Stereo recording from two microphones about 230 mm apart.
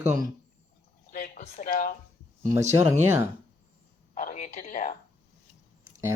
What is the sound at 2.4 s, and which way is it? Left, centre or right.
Speech, centre.